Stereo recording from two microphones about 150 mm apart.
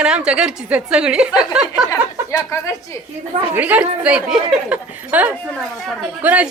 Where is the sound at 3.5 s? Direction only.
10° right (ahead or behind).